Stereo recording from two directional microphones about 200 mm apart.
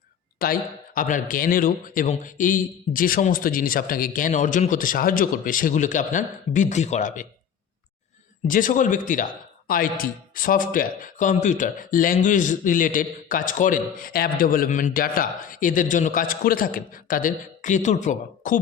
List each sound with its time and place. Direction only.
0.3 s a man's voice: 45° left (ahead or behind)
8.4 s a man's voice: 40° left (ahead or behind)